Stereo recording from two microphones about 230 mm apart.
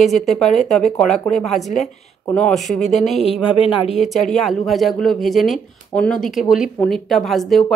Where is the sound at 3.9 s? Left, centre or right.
Centre.